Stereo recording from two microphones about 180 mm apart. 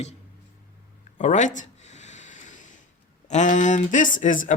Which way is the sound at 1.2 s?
40° left (ahead or behind).